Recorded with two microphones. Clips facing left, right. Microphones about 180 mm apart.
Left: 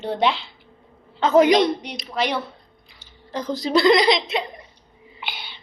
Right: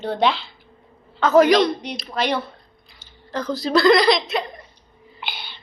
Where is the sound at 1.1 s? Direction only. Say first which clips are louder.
Right 1 dB; 20° left (ahead or behind).